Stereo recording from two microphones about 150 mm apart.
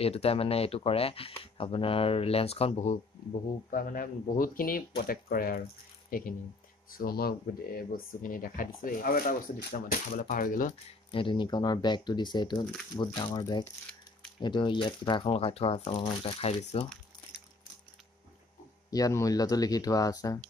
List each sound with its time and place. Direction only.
0.0 s speech: 40° left (ahead or behind)
3.7 s speech: 70° left (ahead or behind)
6.0 s speech: 70° left (ahead or behind)
6.9 s speech: 85° left; by 10.7 s 60° left (ahead or behind)
11.1 s speech: 35° left (ahead or behind)
18.9 s speech: 25° left (ahead or behind)